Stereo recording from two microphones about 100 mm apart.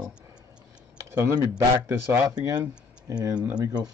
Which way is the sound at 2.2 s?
40° right (ahead or behind).